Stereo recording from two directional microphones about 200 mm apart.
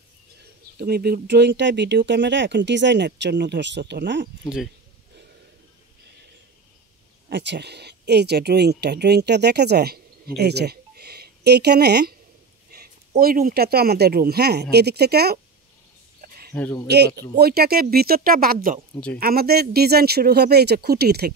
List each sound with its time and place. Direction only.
0.7 s speech: 50° right (ahead or behind)
7.2 s speech: 55° right (ahead or behind)
13.2 s speech: 45° right (ahead or behind)
16.2 s a sound: 50° right (ahead or behind)
16.5 s speech: 10° left (ahead or behind)
16.8 s speech: 55° right (ahead or behind)